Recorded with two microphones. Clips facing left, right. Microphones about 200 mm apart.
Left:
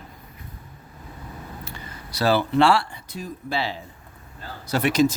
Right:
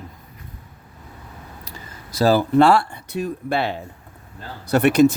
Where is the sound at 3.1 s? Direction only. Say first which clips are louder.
Right 6 dB; 65° right (ahead or behind).